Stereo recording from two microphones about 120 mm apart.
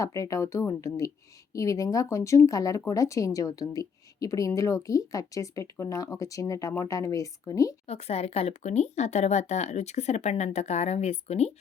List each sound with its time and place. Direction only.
0.0 s speech: 30° left (ahead or behind)
7.9 s speech: 60° left (ahead or behind)